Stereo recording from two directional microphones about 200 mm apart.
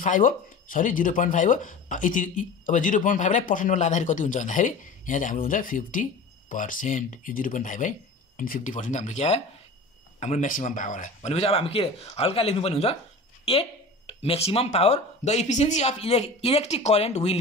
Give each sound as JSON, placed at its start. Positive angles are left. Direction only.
{"t": 0.0, "sound": "speech", "side_deg": 40}